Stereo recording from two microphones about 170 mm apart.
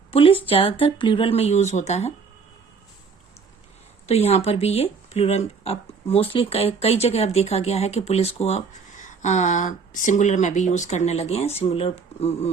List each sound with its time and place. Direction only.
0.1 s speech: 30° left (ahead or behind)
4.0 s speech: 35° left (ahead or behind)